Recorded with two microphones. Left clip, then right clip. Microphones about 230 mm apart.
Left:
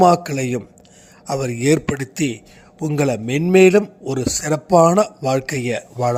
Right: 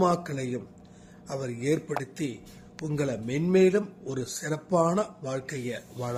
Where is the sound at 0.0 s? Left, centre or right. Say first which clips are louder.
Left 12 dB; left.